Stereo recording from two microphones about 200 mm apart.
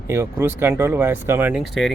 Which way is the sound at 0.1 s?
10° right (ahead or behind).